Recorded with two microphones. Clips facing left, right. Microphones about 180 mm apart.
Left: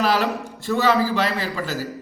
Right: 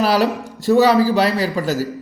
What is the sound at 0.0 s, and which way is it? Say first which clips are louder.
A man's voice: right 4 dB; 40° right (ahead or behind).